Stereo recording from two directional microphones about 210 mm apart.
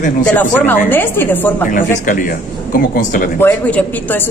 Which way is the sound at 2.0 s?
40° left (ahead or behind).